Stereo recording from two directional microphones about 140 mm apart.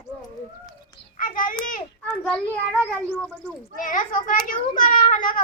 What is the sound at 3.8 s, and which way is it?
A child's voice, 75° left (ahead or behind).